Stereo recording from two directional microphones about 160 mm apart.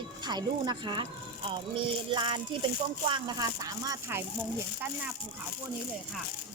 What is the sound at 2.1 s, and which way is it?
Speech, 30° right (ahead or behind).